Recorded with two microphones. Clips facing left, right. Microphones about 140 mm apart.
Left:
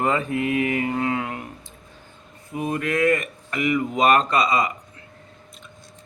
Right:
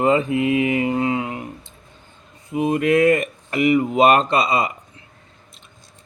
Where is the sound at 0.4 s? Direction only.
45° left (ahead or behind).